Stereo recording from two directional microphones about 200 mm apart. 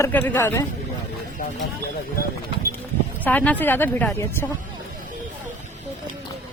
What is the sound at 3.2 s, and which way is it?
Speech, 10° left (ahead or behind).